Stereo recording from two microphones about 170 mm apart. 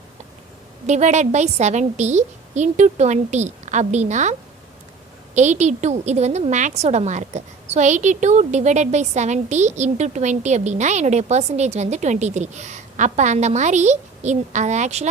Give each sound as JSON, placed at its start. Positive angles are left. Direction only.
{"t": 0.9, "sound": "a woman's voice", "side_deg": -45}